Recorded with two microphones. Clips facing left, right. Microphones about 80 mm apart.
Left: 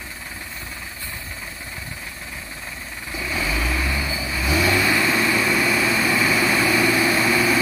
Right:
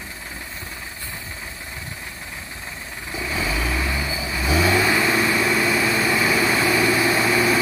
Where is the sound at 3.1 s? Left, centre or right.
Centre.